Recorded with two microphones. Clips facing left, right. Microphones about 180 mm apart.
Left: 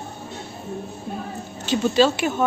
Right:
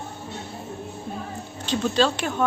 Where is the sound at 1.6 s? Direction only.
5° left (ahead or behind).